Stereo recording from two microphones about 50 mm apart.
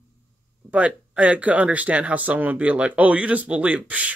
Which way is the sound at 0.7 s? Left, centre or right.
Right.